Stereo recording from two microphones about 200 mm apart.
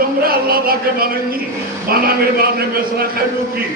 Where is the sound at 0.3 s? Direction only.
50° right (ahead or behind).